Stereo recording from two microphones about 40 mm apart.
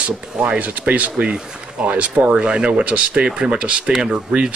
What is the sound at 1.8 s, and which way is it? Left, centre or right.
Speech, right.